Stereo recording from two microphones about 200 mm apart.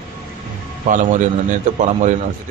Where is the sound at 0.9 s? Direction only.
40° right (ahead or behind).